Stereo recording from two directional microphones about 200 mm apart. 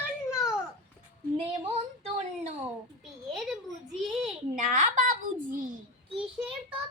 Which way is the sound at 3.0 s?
Centre (ahead or behind).